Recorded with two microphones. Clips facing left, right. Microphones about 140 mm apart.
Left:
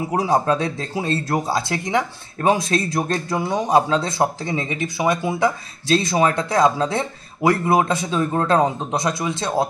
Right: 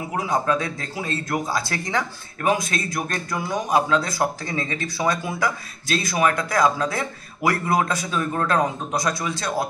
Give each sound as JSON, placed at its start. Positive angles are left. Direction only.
{"t": 0.1, "sound": "speech", "side_deg": 35}
{"t": 2.5, "sound": "a man's voice", "side_deg": 30}